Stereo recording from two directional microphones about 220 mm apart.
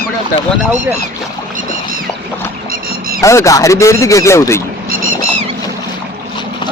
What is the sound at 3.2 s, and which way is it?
A man's voice, 15° left (ahead or behind).